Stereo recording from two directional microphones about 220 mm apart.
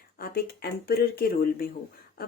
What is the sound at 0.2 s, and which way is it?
Speech, 45° left (ahead or behind).